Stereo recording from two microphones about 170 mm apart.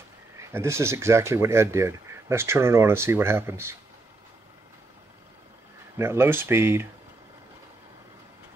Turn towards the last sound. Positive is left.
turn(degrees=-15)  # may be behind; listen again after turning